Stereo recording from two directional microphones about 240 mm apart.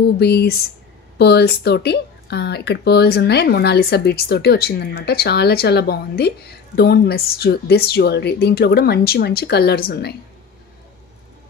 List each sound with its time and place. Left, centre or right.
0.0 s speech: left